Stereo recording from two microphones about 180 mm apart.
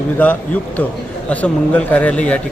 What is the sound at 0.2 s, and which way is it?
A man's voice, 10° left (ahead or behind).